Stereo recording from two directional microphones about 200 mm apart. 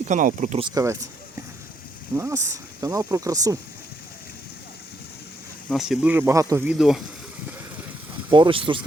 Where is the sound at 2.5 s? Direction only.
15° right (ahead or behind).